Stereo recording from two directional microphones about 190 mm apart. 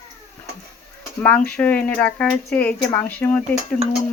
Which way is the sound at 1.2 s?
5° left (ahead or behind).